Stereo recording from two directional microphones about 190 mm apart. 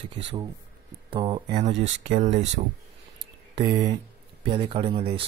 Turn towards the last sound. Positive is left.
turn(degrees=-25)  # may be behind; listen again after turning